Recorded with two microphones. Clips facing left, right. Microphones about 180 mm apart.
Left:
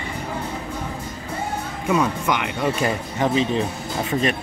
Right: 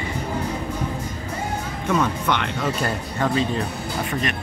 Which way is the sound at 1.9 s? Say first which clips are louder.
Left 1 dB; 5° left (ahead or behind).